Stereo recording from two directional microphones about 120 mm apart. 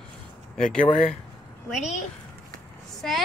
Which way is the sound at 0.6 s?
5° left (ahead or behind).